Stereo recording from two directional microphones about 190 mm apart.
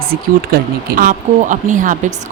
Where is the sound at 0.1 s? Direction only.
50° right (ahead or behind).